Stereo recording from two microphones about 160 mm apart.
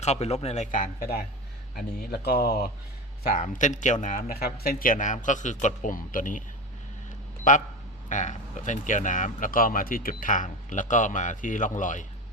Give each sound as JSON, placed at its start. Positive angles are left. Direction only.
{"t": 0.0, "sound": "speech", "side_deg": 45}
{"t": 1.7, "sound": "speech", "side_deg": 75}
{"t": 3.2, "sound": "speech", "side_deg": 55}
{"t": 7.5, "sound": "speech", "side_deg": 55}